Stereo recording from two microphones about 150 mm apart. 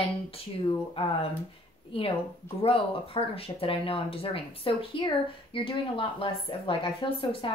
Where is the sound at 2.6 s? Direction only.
40° left (ahead or behind).